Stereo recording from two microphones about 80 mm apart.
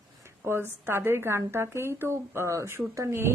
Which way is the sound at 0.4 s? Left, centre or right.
Right.